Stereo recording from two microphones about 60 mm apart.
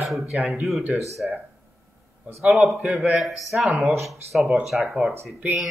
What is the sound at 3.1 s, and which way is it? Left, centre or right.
Speech, centre.